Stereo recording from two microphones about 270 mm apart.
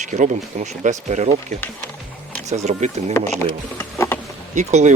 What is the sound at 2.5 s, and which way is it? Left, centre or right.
Speech, right.